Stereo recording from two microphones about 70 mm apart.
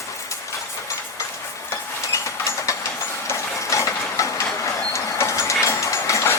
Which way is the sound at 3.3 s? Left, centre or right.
Left.